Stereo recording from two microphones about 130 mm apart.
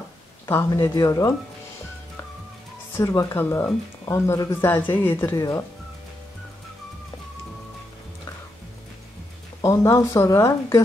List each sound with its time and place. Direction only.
0.7 s speech: 20° left (ahead or behind)
3.0 s speech: 25° left (ahead or behind)
9.6 s speech: 25° left (ahead or behind)